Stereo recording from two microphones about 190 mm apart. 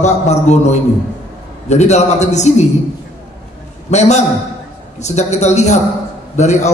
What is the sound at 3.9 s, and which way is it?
A man's voice, 35° left (ahead or behind).